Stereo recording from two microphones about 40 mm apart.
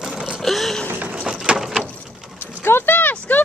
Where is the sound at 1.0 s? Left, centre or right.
Right.